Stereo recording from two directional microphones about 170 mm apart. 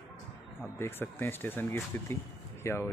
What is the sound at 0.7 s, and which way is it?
Speech, 15° left (ahead or behind).